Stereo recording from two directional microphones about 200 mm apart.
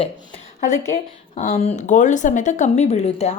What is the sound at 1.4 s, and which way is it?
A woman's voice, 35° left (ahead or behind).